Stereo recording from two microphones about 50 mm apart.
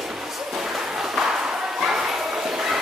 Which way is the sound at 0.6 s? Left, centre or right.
Centre.